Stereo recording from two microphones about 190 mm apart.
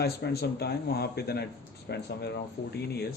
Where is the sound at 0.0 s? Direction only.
55° left (ahead or behind).